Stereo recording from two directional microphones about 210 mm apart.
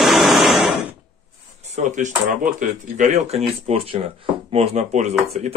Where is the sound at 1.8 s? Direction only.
35° right (ahead or behind).